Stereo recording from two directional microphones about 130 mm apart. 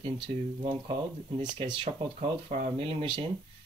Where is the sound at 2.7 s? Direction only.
45° right (ahead or behind).